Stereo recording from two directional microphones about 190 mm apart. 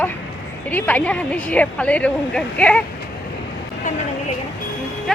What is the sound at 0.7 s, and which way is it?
A woman's voice, 10° left (ahead or behind).